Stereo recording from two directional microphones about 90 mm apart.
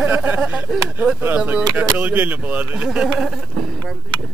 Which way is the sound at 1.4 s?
15° right (ahead or behind).